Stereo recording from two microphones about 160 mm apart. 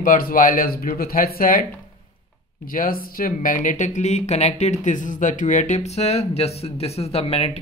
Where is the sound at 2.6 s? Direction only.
60° left (ahead or behind).